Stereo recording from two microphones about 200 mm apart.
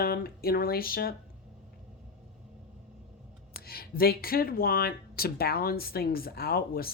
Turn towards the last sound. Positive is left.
turn(degrees=50)  # may be behind; listen again after turning